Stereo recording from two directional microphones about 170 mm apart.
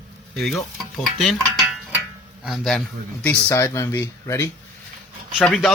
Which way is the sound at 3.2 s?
15° left (ahead or behind).